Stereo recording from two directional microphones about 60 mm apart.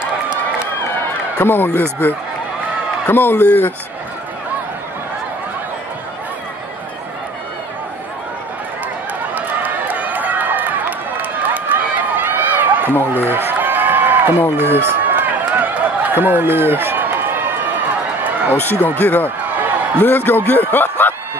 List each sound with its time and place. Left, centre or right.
1.4 s speech: left
9.3 s run: right
18.5 s speech: left